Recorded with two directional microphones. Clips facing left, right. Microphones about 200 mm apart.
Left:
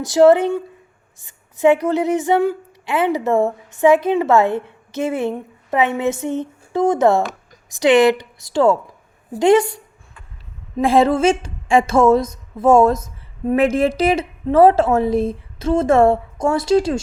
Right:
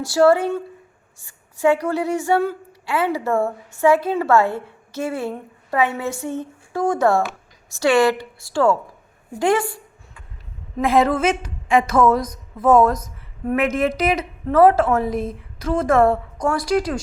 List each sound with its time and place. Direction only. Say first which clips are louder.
0.0 s a woman's voice: left 4 dB; 20° left (ahead or behind)
10.8 s a woman's voice: left 3 dB; 30° left (ahead or behind)